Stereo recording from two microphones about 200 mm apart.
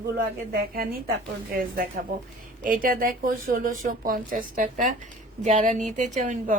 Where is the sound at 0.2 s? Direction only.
45° right (ahead or behind).